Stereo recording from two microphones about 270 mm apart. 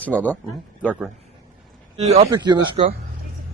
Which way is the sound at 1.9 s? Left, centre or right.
Right.